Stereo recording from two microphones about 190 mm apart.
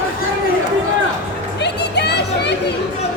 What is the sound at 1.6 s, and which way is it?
Music, 60° left (ahead or behind).